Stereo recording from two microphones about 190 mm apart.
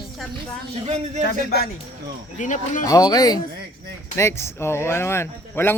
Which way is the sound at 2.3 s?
40° left (ahead or behind).